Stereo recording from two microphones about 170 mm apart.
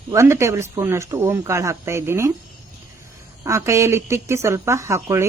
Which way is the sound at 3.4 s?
15° right (ahead or behind).